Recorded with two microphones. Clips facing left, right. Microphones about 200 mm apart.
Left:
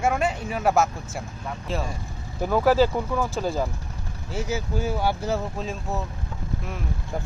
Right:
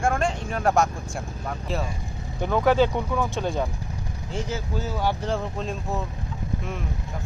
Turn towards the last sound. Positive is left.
turn(degrees=0)  # may be behind; listen again after turning